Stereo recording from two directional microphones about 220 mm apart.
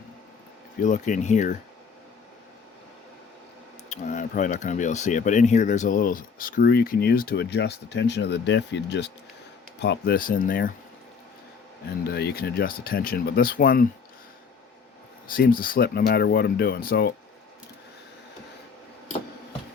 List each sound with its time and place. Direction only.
0.8 s speech: 35° left (ahead or behind)
3.8 s speech: 35° left (ahead or behind)
12.0 s speech: 45° left (ahead or behind)
15.3 s speech: 40° left (ahead or behind)